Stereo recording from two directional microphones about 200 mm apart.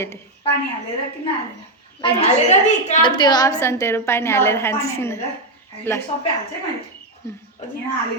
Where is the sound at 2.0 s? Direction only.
30° left (ahead or behind).